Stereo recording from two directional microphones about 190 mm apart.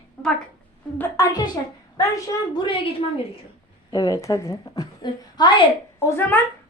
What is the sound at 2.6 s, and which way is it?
A woman's voice, 25° left (ahead or behind).